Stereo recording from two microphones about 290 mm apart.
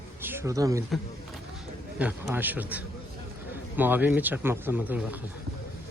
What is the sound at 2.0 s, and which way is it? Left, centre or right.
A man's voice, centre.